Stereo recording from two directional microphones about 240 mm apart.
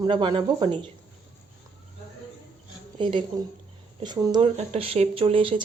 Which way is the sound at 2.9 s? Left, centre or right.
Right.